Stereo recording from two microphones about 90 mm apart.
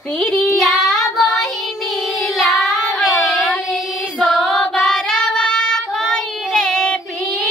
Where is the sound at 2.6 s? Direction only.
Centre (ahead or behind).